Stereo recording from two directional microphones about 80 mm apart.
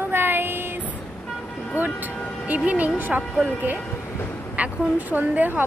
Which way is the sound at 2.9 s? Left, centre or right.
Right.